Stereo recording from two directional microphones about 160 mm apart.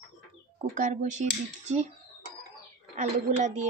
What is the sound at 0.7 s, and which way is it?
Speech, 50° right (ahead or behind).